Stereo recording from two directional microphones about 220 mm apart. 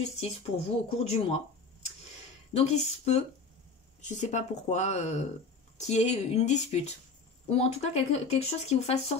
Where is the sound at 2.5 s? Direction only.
30° left (ahead or behind).